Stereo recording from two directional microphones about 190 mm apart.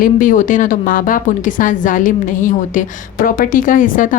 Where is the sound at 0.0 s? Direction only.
45° left (ahead or behind).